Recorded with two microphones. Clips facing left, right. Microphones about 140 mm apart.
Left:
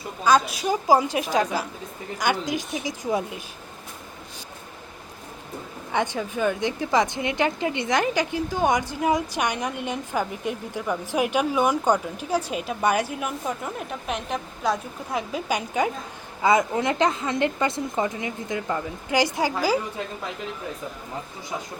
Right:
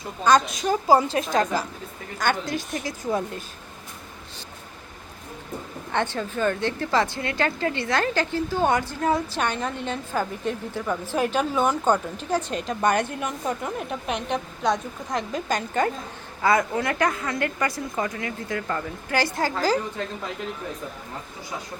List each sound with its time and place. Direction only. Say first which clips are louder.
0.3 s a woman's voice: right 1 dB; 5° left (ahead or behind)
5.9 s a woman's voice: left 1 dB; 10° left (ahead or behind)
16.4 s a woman's voice: left 1 dB; 20° left (ahead or behind)